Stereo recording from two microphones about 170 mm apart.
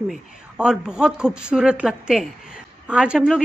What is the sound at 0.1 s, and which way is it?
A man's voice, 5° right (ahead or behind).